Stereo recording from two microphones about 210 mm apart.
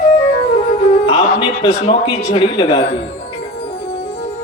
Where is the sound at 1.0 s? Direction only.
25° left (ahead or behind).